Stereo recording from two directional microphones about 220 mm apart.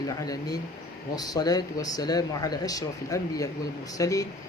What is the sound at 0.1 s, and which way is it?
Speech, 15° left (ahead or behind).